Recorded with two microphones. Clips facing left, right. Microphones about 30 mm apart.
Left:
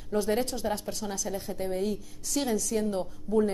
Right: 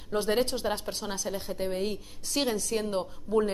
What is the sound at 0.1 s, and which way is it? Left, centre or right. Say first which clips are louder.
A woman's voice: right 1 dB; right.